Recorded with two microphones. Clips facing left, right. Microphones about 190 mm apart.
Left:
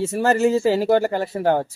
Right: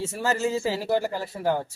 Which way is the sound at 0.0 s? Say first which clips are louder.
Left 8 dB; 60° left (ahead or behind).